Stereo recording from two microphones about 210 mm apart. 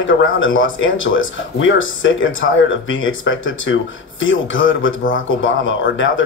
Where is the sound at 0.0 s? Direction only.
65° left (ahead or behind).